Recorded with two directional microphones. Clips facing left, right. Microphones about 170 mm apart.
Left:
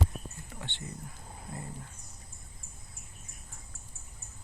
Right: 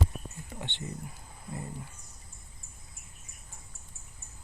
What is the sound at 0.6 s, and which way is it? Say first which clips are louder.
Speech: right 3 dB; 20° right (ahead or behind).